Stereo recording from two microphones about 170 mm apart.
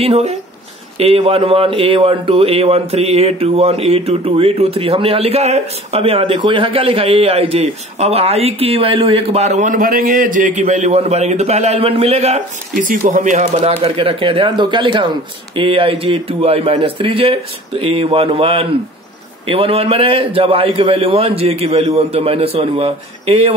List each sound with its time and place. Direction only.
0.0 s speech: 35° right (ahead or behind)